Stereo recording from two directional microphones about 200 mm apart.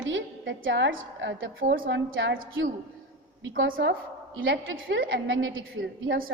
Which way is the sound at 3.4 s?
70° right (ahead or behind).